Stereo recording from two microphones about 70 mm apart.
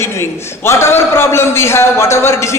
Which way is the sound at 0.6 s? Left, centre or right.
Left.